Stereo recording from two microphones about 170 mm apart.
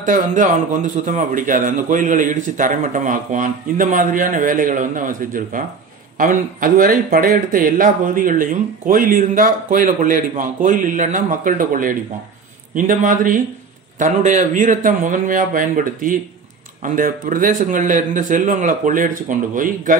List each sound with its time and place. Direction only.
0.0 s speech: 50° right (ahead or behind)